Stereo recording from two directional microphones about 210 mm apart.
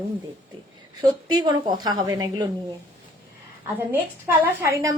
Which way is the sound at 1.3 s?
20° right (ahead or behind).